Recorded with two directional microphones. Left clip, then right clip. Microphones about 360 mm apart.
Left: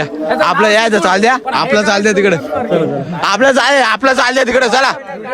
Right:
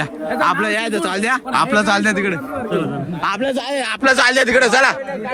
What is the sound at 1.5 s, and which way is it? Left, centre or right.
Speech, centre.